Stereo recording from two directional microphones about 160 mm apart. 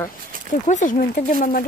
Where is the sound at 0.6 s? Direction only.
50° left (ahead or behind).